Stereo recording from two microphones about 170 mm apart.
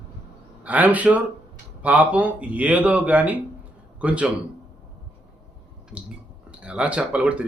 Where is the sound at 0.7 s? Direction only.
10° right (ahead or behind).